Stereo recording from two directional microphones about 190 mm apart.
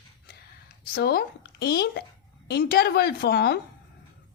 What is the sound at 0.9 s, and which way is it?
A woman's voice, 55° left (ahead or behind).